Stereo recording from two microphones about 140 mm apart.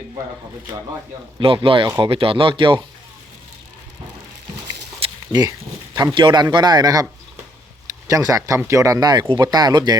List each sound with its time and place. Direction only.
1.4 s speech: 40° right (ahead or behind)
5.3 s speech: 30° right (ahead or behind)